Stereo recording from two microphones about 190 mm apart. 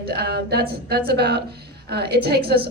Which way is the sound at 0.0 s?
55° right (ahead or behind).